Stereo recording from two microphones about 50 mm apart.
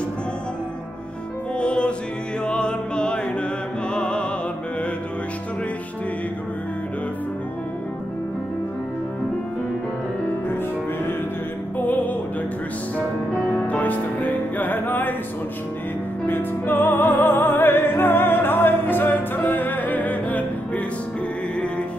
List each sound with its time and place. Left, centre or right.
1.6 s music: left
11.8 s music: left
13.5 s music: left
16.3 s music: left